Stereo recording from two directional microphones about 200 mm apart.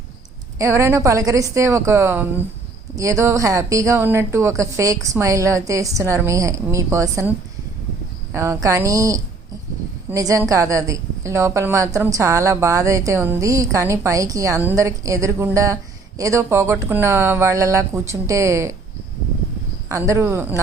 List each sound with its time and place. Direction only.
0.6 s a woman's voice: 15° right (ahead or behind)
19.9 s a woman's voice: 15° right (ahead or behind)